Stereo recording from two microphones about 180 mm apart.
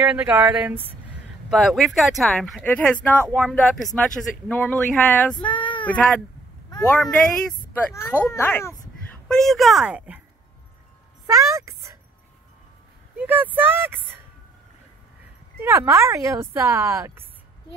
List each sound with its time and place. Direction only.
0.0 s speech: 5° right (ahead or behind)
5.4 s child singing: 30° left (ahead or behind)
7.0 s speech: 5° left (ahead or behind)
7.9 s a woman's voice: 15° left (ahead or behind); by 10.2 s 5° right (ahead or behind)
11.2 s speech: 15° right (ahead or behind)
13.2 s speech: 10° right (ahead or behind)
15.6 s speech: 15° right (ahead or behind)